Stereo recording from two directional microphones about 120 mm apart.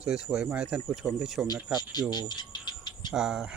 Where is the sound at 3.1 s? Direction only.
5° right (ahead or behind).